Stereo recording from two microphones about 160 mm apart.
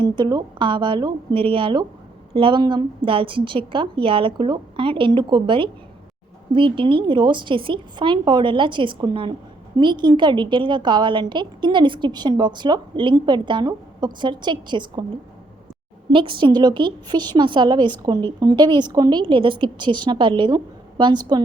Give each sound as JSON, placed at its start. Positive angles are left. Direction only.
{"t": 0.0, "sound": "a woman's voice", "side_deg": -25}
{"t": 16.1, "sound": "a woman's voice", "side_deg": -30}